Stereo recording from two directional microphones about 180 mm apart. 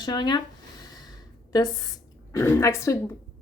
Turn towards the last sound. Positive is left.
turn(degrees=15)  # may be behind; listen again after turning